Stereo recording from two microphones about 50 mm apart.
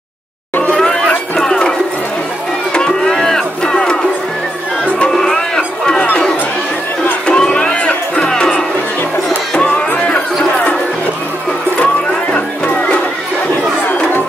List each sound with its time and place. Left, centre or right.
0.7 s chatter: centre
1.4 s a sound: centre
2.7 s music: centre
5.1 s a sound: centre
7.2 s music: centre
11.8 s music: left